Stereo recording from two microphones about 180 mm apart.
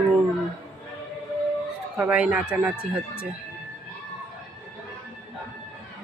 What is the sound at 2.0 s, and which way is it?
Speech, 5° right (ahead or behind).